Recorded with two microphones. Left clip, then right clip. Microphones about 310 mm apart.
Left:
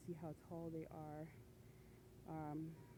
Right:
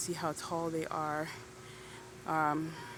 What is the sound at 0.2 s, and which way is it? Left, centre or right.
Speech, left.